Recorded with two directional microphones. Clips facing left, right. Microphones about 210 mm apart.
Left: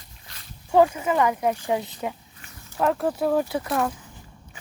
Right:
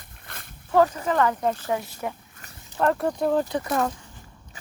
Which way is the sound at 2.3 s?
45° right (ahead or behind).